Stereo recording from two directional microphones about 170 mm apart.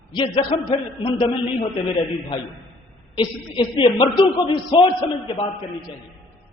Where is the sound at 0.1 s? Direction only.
25° left (ahead or behind).